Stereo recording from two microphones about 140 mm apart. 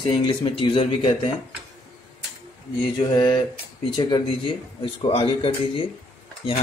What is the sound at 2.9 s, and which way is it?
Speech, 35° left (ahead or behind).